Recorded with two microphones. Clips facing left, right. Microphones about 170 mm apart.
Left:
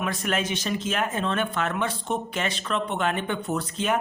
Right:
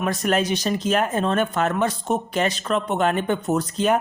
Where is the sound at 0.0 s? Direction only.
40° right (ahead or behind).